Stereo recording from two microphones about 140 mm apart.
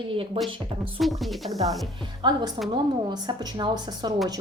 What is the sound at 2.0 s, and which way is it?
A woman's voice, 35° right (ahead or behind).